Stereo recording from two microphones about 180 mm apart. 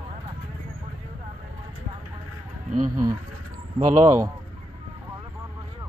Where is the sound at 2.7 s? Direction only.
45° right (ahead or behind).